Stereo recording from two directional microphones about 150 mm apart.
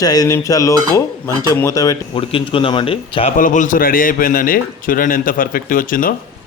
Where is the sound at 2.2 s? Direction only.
35° left (ahead or behind).